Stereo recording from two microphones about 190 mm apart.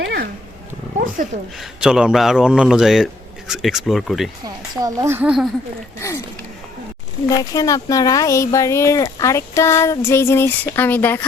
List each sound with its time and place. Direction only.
0.0 s dog: 55° right (ahead or behind)
0.9 s speech: 45° right (ahead or behind)
1.8 s a man's voice: 5° right (ahead or behind)
4.4 s speech: 20° right (ahead or behind)
7.3 s speech: 20° left (ahead or behind)